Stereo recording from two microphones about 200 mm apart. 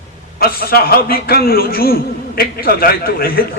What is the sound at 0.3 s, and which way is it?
A man's voice, 50° left (ahead or behind).